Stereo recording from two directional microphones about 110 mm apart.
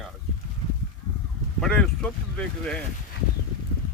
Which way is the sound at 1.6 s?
5° left (ahead or behind).